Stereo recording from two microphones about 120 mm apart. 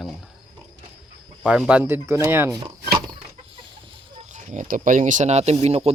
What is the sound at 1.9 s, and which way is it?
Speech, 20° right (ahead or behind).